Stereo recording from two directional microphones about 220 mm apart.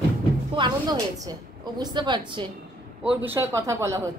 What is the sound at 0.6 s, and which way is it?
Music, 20° right (ahead or behind).